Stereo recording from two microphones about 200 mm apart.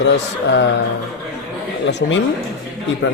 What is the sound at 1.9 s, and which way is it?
Speech, 65° left (ahead or behind).